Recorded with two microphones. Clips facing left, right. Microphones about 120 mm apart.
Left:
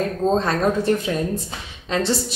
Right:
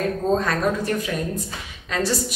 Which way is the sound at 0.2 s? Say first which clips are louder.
Left 2 dB; 25° left (ahead or behind).